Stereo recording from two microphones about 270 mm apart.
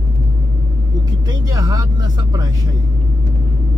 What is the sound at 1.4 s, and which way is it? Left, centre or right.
Speech, centre.